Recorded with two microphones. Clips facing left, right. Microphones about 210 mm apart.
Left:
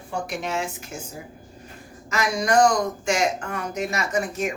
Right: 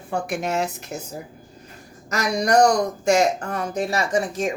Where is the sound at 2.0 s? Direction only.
40° right (ahead or behind).